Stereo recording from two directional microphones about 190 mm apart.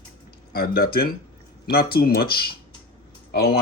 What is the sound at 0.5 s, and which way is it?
Speech, 55° left (ahead or behind).